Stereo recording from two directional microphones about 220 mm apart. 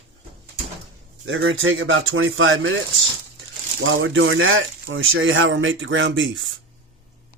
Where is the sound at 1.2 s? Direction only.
60° right (ahead or behind).